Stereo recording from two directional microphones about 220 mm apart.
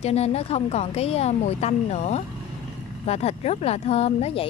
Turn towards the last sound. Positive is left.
turn(degrees=30)  # may be behind; listen again after turning